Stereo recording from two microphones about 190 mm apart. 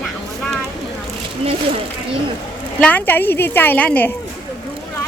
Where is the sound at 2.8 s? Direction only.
10° left (ahead or behind).